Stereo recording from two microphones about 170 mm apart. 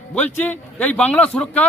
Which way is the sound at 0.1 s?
10° left (ahead or behind).